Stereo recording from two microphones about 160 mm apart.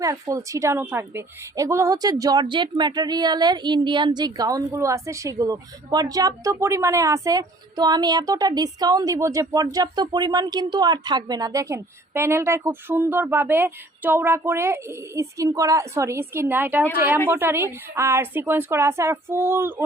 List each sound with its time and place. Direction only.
0.0 s a woman's voice: 20° right (ahead or behind)